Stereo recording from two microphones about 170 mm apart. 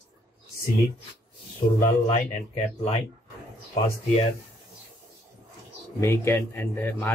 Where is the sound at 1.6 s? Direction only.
50° left (ahead or behind).